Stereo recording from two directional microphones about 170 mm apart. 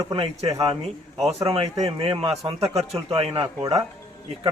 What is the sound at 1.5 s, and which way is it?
A man's voice, 35° right (ahead or behind).